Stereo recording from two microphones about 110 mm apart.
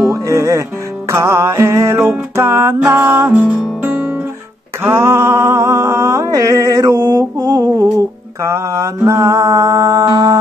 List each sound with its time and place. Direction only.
0.1 s music: 30° right (ahead or behind)
3.8 s guitar: 15° right (ahead or behind)
4.8 s mantra: 25° right (ahead or behind)
8.5 s music: 25° right (ahead or behind)